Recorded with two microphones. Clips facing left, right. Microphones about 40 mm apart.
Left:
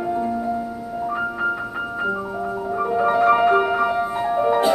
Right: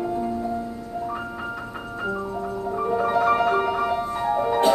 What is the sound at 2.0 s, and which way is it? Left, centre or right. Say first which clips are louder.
Music: left 3 dB; centre.